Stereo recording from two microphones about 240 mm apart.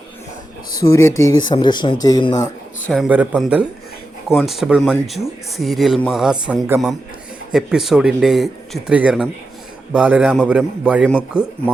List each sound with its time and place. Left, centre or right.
0.9 s speech: centre
2.9 s speech: centre